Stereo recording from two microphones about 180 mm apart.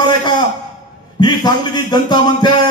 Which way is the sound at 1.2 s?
25° left (ahead or behind).